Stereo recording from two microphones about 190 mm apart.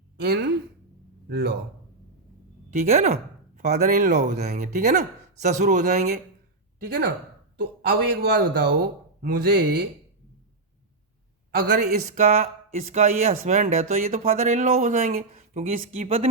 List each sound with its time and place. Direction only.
0.2 s a man's voice: 60° right (ahead or behind)
2.6 s speech: 40° right (ahead or behind)
6.8 s a man's voice: 55° right (ahead or behind)
11.5 s speech: 40° right (ahead or behind)